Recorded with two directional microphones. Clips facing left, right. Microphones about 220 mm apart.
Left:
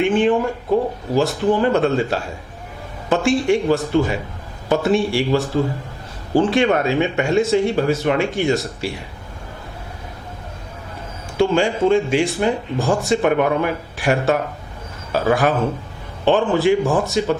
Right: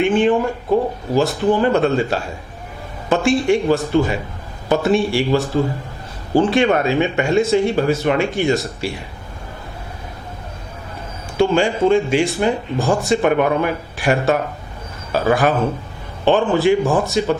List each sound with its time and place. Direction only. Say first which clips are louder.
0.0 s speech: right 1 dB; 15° right (ahead or behind)
0.7 s a sound: right 1 dB; 35° right (ahead or behind)
1.5 s speech: right 1 dB; 15° right (ahead or behind)
11.5 s speech: right 1 dB; 15° right (ahead or behind)
16.8 s speech: right 1 dB; 25° right (ahead or behind)
17.1 s speech: right 1 dB; 10° right (ahead or behind)